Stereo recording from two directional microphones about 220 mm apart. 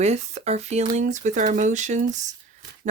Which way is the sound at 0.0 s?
30° right (ahead or behind).